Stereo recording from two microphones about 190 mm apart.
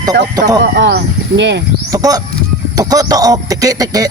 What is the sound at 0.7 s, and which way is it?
Speech, 65° right (ahead or behind).